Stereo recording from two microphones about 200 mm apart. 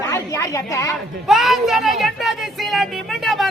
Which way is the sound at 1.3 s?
Centre (ahead or behind).